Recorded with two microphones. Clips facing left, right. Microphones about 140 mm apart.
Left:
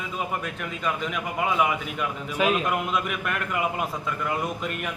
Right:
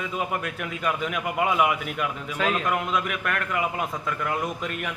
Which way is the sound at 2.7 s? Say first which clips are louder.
Even; 5° left (ahead or behind).